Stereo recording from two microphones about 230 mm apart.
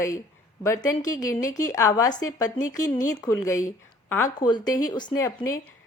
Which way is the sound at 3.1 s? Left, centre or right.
Centre.